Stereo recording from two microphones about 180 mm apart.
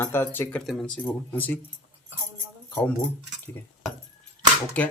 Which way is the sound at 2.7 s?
10° left (ahead or behind).